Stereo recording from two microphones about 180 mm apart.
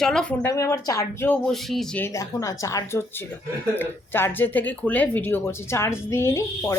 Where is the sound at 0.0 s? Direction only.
5° left (ahead or behind).